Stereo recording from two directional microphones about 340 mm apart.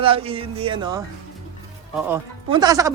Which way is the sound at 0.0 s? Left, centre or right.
Centre.